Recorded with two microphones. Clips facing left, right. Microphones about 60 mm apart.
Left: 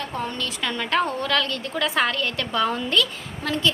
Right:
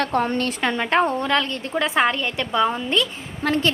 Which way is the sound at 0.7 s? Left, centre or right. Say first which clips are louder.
Right 3 dB; right.